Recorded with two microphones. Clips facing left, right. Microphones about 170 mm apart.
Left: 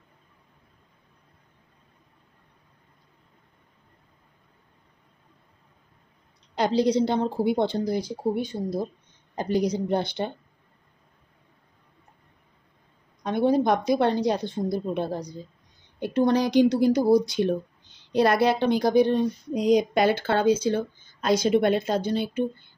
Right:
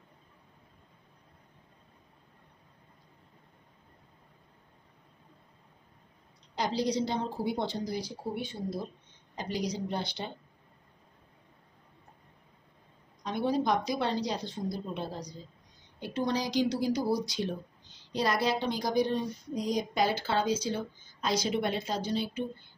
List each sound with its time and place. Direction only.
6.5 s a woman's voice: 60° left (ahead or behind)
8.4 s speech: 40° left (ahead or behind)
9.3 s a woman's voice: 50° left (ahead or behind)
13.2 s a woman's voice: 55° left (ahead or behind)